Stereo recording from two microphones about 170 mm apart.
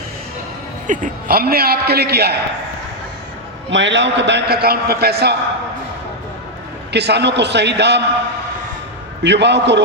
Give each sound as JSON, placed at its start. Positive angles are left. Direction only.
{"t": 0.9, "sound": "a man's voice", "side_deg": -55}
{"t": 3.7, "sound": "a man's voice", "side_deg": -90}
{"t": 6.9, "sound": "a man's voice", "side_deg": -80}
{"t": 9.2, "sound": "a man's voice", "side_deg": -90}